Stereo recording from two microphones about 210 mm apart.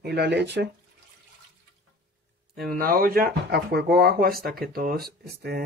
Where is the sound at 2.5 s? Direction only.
45° right (ahead or behind).